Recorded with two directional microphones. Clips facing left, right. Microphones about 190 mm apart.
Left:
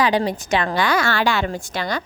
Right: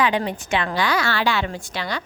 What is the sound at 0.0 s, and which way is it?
A woman's voice, 35° left (ahead or behind).